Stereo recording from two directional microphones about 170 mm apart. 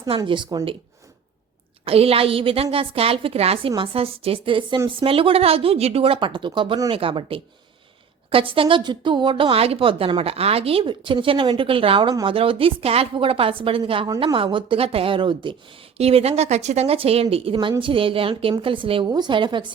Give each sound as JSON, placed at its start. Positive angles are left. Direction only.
{"t": 0.2, "sound": "a woman's voice", "side_deg": -25}
{"t": 1.8, "sound": "a woman's voice", "side_deg": -35}